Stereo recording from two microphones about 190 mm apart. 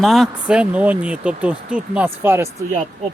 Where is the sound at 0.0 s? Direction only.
Centre (ahead or behind).